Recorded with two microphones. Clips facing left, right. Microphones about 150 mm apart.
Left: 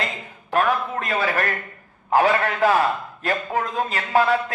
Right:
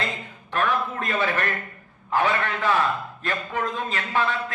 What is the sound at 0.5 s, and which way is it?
A man's voice, 40° left (ahead or behind).